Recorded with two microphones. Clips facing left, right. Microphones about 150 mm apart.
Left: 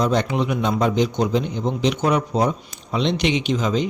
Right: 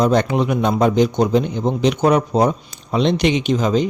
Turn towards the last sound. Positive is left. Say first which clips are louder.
# right 4 dB
turn(degrees=-40)  # may be behind; listen again after turning